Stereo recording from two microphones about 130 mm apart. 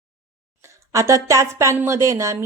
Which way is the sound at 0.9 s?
25° right (ahead or behind).